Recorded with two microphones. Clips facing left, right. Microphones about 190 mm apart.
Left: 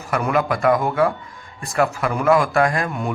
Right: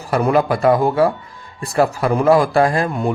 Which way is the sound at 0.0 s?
30° right (ahead or behind).